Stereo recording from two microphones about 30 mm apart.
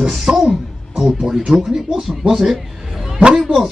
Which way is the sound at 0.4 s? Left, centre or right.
Centre.